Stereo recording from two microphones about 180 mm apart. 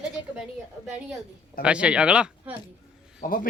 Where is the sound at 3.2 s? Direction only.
50° left (ahead or behind).